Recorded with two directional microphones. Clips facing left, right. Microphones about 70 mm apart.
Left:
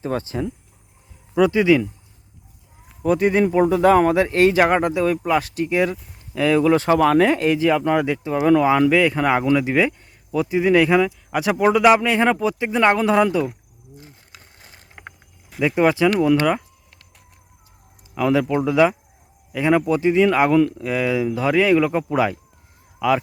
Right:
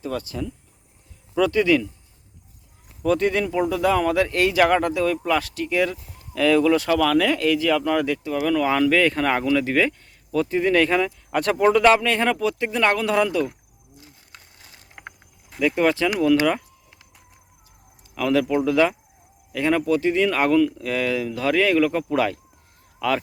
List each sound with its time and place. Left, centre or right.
0.0 s speech: left
1.4 s speech: centre
3.0 s speech: centre
3.4 s speech: left
14.3 s vehicle: centre
14.9 s a sound: centre
15.6 s speech: centre
18.1 s speech: centre